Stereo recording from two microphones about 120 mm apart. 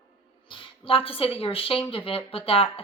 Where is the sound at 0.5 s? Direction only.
50° left (ahead or behind).